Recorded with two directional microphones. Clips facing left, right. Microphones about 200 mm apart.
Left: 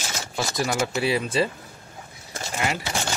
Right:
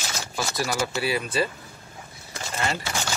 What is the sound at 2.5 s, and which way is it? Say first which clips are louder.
Speech: left 1 dB; 15° left (ahead or behind).